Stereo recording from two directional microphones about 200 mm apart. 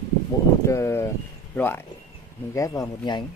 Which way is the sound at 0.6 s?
15° left (ahead or behind).